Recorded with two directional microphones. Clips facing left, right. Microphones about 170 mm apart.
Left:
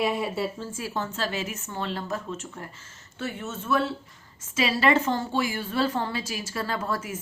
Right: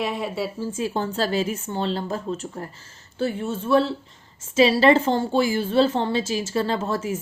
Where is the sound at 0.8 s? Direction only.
30° right (ahead or behind).